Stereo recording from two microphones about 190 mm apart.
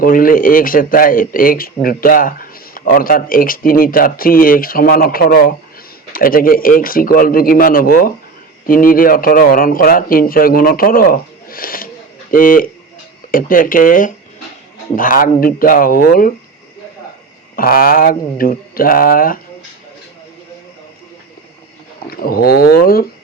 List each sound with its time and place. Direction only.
0.0 s speech: 50° left (ahead or behind)
17.6 s speech: 50° left (ahead or behind)
22.0 s speech: 50° left (ahead or behind)